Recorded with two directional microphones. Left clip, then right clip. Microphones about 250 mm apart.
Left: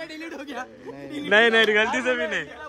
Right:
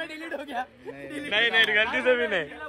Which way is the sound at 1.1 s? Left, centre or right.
Left.